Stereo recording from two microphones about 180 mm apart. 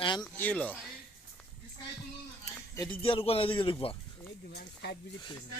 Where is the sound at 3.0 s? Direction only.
30° left (ahead or behind).